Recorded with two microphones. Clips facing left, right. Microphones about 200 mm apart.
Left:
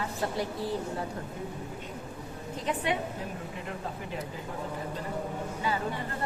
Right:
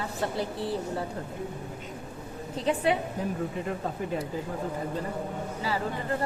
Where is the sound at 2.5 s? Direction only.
30° right (ahead or behind).